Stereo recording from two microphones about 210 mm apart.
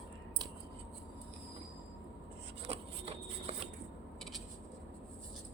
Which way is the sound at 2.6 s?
30° right (ahead or behind).